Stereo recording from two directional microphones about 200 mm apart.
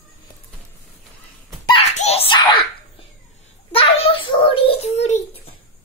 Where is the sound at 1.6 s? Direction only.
30° left (ahead or behind).